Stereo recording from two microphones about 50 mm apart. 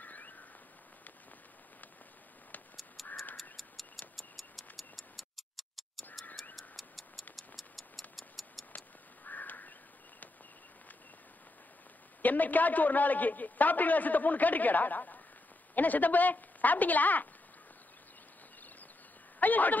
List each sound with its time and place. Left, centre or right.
0.0 s rodents: left
3.0 s crow: centre
4.2 s music: centre
6.5 s a sound: centre
8.2 s rattle: centre
8.7 s crow: left
12.2 s a man's voice: left
19.4 s a man's voice: left